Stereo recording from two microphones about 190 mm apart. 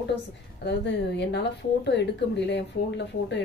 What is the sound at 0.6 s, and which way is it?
A woman's voice, 60° left (ahead or behind).